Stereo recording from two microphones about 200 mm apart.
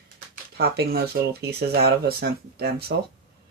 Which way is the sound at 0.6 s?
50° right (ahead or behind).